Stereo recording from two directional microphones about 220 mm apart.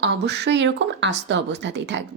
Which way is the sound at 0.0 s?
50° right (ahead or behind).